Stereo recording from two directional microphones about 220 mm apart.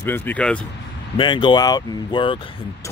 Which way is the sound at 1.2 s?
20° left (ahead or behind).